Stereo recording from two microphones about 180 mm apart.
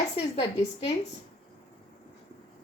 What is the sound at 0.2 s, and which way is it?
Speech, 30° left (ahead or behind).